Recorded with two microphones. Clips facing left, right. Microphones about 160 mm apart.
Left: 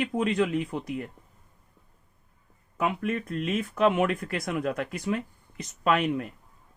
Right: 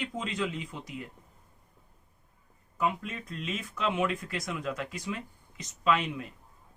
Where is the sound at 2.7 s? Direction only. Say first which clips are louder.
Left 4 dB; 65° left (ahead or behind).